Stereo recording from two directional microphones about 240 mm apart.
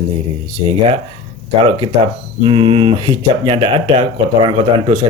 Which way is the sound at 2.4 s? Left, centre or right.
Right.